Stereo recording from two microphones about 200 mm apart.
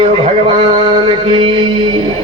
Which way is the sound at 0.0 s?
25° right (ahead or behind).